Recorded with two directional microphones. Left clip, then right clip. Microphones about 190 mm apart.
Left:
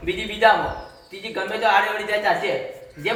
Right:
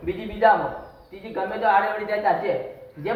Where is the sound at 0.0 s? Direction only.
15° left (ahead or behind).